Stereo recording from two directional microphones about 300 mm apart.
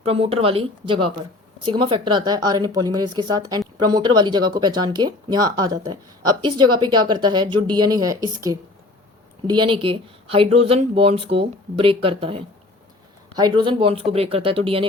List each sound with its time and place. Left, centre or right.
0.0 s speech: centre